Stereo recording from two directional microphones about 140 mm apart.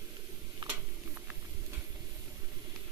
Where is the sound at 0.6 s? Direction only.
30° right (ahead or behind).